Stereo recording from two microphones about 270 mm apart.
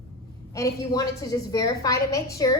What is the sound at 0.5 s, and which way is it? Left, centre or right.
A woman's voice, centre.